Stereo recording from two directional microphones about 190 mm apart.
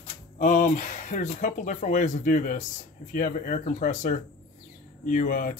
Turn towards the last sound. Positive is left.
turn(degrees=45)  # may be behind; listen again after turning